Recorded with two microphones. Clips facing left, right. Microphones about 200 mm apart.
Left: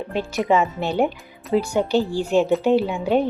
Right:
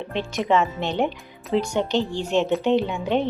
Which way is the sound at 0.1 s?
5° left (ahead or behind).